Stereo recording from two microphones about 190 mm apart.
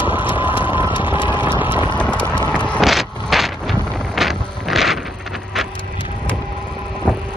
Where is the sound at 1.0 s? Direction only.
10° right (ahead or behind).